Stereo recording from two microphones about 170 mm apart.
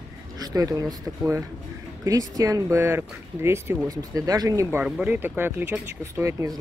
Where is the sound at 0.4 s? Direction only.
20° right (ahead or behind).